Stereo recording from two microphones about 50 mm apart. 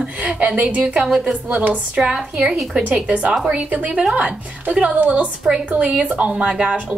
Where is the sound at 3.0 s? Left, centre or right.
Right.